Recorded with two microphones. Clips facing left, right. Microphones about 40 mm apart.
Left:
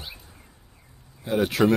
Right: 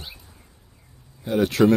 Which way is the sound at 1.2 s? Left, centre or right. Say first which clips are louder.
Right 3 dB; centre.